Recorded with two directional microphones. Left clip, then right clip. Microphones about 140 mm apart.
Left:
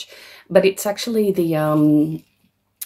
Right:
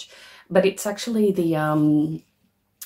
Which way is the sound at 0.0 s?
35° left (ahead or behind).